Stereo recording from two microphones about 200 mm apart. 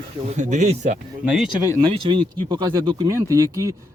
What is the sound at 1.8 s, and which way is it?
Speech, 20° right (ahead or behind).